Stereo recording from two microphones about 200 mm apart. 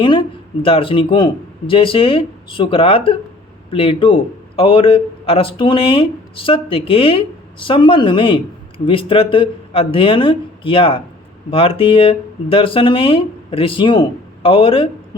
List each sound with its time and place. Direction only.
0.0 s a man's voice: 25° left (ahead or behind)